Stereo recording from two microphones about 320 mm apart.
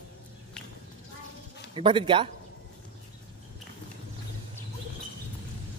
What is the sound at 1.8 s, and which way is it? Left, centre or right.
Speech, centre.